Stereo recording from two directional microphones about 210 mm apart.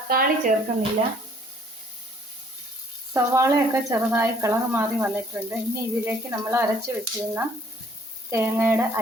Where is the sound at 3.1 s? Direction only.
15° right (ahead or behind).